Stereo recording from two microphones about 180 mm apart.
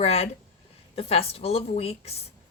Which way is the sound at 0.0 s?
35° left (ahead or behind).